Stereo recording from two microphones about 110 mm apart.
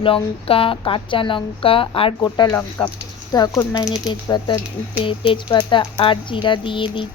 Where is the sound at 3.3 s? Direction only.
35° left (ahead or behind).